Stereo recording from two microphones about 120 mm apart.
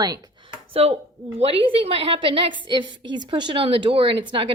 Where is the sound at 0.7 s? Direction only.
55° right (ahead or behind).